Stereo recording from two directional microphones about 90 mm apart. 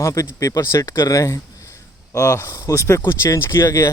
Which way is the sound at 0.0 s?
35° left (ahead or behind).